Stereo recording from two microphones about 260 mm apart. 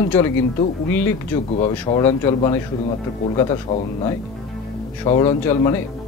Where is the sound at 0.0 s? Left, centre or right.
Centre.